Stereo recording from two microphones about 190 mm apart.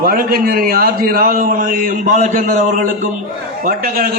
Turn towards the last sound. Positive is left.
turn(degrees=-50)  # may be behind; listen again after turning